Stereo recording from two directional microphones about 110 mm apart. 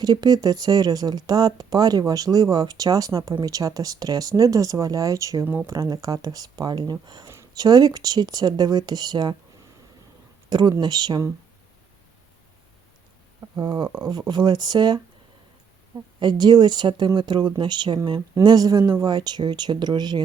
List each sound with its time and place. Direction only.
0.0 s speech: 40° right (ahead or behind)
10.5 s speech: 40° right (ahead or behind)
13.6 s speech: 40° right (ahead or behind)
16.2 s speech: 40° right (ahead or behind)
18.4 s speech: 35° right (ahead or behind)